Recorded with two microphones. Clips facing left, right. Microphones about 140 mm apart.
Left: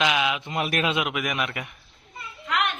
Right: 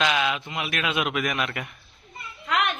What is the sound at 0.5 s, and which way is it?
Speech, 40° left (ahead or behind).